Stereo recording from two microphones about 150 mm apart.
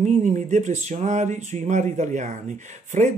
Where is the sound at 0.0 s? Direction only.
55° right (ahead or behind).